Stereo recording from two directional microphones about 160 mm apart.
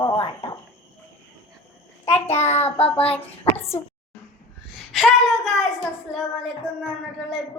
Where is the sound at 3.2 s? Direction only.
15° left (ahead or behind).